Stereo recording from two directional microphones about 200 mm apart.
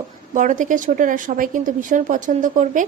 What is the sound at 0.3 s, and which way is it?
A woman's voice, 40° right (ahead or behind).